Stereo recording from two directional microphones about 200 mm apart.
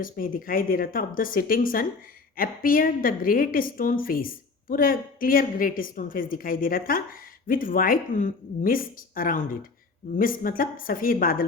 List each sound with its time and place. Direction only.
0.0 s a woman's voice: 45° left (ahead or behind)